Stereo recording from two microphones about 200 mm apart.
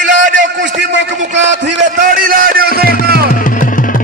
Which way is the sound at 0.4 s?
65° right (ahead or behind).